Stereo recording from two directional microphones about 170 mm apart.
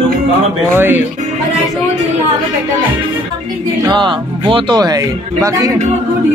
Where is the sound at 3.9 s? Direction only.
30° right (ahead or behind).